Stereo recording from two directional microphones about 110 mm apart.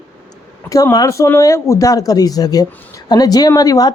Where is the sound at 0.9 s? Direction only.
30° left (ahead or behind).